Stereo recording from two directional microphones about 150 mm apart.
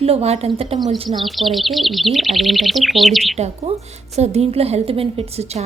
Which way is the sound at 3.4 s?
45° right (ahead or behind).